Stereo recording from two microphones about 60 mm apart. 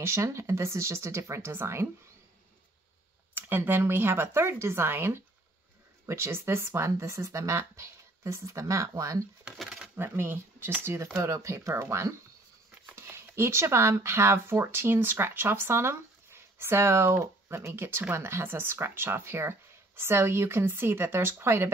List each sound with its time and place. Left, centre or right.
0.0 s speech: right
3.3 s speech: right
9.9 s speech: right
11.1 s speech: right
12.9 s a sound: right
13.4 s speech: right